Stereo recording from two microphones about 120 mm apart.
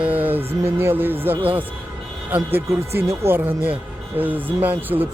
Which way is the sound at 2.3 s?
20° right (ahead or behind).